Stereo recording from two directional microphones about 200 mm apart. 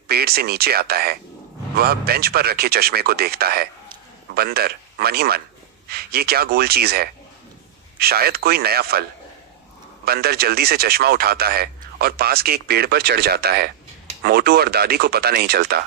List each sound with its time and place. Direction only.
0.1 s a man's voice: 50° right (ahead or behind)
10.1 s speech: 50° right (ahead or behind)